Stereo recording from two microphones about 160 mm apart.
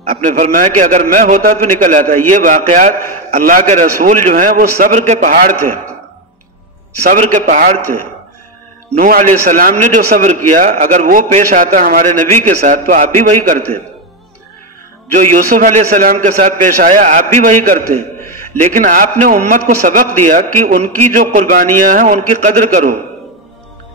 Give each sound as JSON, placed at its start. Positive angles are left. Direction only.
{"t": 0.1, "sound": "a man's voice", "side_deg": -50}
{"t": 7.1, "sound": "a man's voice", "side_deg": -50}
{"t": 8.9, "sound": "a man's voice", "side_deg": -60}
{"t": 15.1, "sound": "a man's voice", "side_deg": -55}